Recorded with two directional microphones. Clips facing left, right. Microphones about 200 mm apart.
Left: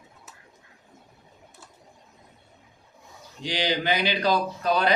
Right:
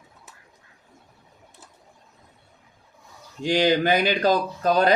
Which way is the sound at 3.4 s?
50° right (ahead or behind).